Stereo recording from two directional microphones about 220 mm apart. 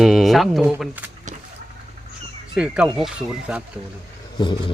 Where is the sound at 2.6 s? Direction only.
5° right (ahead or behind).